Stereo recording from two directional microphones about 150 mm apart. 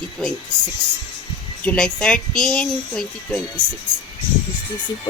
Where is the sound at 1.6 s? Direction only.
10° left (ahead or behind).